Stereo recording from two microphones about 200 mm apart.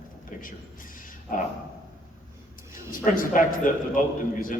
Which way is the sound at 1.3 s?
45° left (ahead or behind).